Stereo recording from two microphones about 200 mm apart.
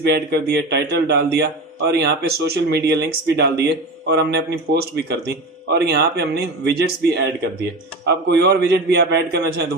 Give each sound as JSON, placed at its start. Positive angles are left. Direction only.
{"t": 0.0, "sound": "a man's voice", "side_deg": -55}